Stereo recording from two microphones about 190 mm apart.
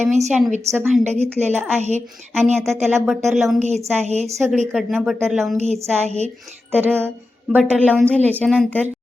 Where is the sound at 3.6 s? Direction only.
35° right (ahead or behind).